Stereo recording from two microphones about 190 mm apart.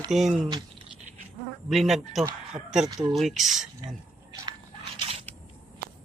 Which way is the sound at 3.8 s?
20° right (ahead or behind).